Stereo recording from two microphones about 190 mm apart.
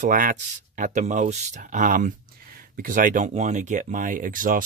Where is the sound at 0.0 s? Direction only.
45° right (ahead or behind).